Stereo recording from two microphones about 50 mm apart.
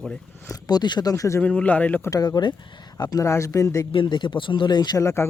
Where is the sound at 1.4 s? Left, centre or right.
Left.